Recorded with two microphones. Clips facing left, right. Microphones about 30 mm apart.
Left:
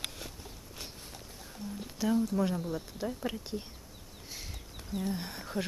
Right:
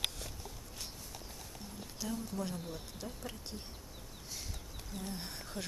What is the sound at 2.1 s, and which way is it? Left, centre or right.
Speech, left.